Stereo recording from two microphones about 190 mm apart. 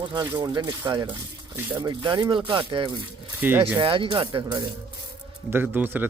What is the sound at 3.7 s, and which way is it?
Speech, 25° right (ahead or behind).